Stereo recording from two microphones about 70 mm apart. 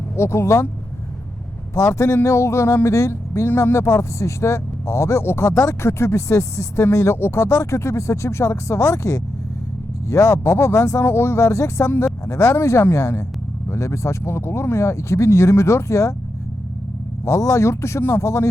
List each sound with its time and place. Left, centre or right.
0.2 s speech: left
1.7 s speech: left
17.2 s speech: left